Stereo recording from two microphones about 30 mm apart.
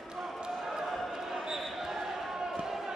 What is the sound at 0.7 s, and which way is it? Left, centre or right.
Basketball bounce, centre.